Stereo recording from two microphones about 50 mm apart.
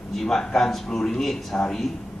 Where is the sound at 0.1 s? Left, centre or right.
Centre.